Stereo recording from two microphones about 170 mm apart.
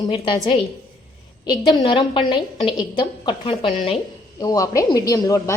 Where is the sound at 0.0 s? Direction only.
25° left (ahead or behind).